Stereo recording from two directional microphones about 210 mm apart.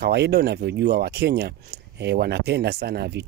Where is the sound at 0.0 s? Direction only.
50° right (ahead or behind).